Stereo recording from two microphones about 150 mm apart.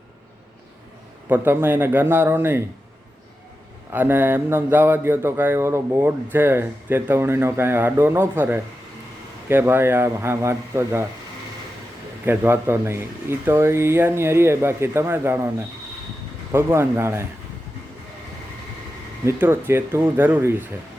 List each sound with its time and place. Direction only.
1.3 s speech: 15° right (ahead or behind)
3.9 s speech: 15° right (ahead or behind)
12.2 s speech: 15° right (ahead or behind)
19.2 s speech: 15° right (ahead or behind)